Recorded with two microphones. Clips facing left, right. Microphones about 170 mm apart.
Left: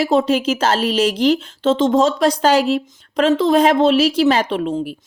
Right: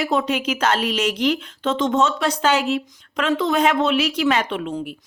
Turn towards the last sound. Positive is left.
turn(degrees=35)  # may be behind; listen again after turning